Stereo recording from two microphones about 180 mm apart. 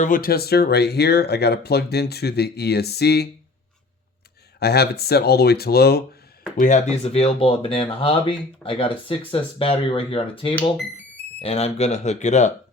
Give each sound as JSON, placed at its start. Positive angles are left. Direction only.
{"t": 0.0, "sound": "speech", "side_deg": 50}
{"t": 4.6, "sound": "speech", "side_deg": 65}
{"t": 6.6, "sound": "speech", "side_deg": 45}